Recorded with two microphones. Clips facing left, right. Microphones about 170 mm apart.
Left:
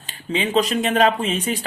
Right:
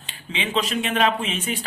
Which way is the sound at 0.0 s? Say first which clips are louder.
Left 6 dB; 40° left (ahead or behind).